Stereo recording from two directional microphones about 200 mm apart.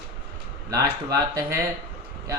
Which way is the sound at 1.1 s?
15° right (ahead or behind).